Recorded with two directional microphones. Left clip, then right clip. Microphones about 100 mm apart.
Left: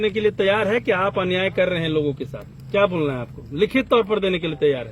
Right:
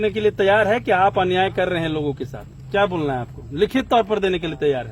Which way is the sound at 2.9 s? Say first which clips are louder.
Even; 35° right (ahead or behind).